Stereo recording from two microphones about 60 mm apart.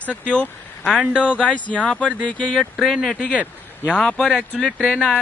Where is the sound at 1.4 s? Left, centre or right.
Left.